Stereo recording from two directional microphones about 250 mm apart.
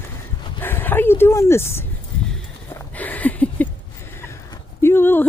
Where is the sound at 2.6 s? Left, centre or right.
Centre.